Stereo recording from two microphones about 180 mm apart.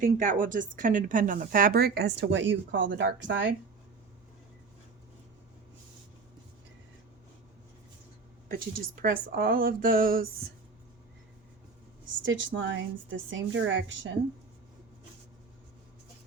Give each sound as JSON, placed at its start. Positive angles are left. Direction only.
{"t": 0.0, "sound": "speech", "side_deg": -50}
{"t": 8.4, "sound": "speech", "side_deg": -55}
{"t": 12.2, "sound": "a woman's voice", "side_deg": -90}